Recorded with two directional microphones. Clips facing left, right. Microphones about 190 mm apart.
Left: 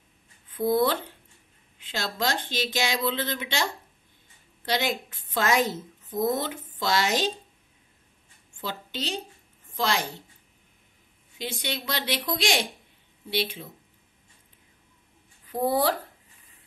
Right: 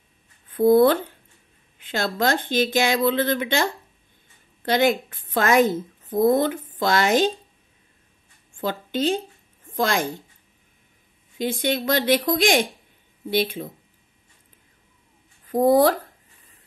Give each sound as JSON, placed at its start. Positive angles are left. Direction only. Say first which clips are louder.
{"t": 0.5, "sound": "a woman's voice", "louder": "right 8 dB", "side_deg": -55}
{"t": 8.5, "sound": "a woman's voice", "louder": "right 9 dB", "side_deg": -50}
{"t": 11.3, "sound": "speech", "louder": "right 10 dB", "side_deg": -50}
{"t": 15.4, "sound": "speech", "louder": "right 8 dB", "side_deg": -45}